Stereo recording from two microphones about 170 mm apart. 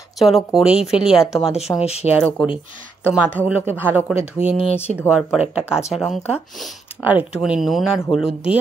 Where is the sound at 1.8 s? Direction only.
40° left (ahead or behind).